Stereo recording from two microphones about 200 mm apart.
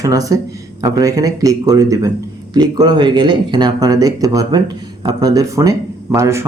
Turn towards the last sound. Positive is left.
turn(degrees=-15)  # may be behind; listen again after turning